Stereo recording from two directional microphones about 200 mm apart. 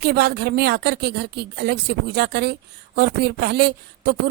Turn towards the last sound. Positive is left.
turn(degrees=-55)  # may be behind; listen again after turning